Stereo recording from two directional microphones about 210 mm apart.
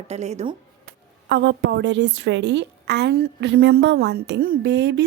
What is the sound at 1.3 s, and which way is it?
A woman's voice, 55° right (ahead or behind).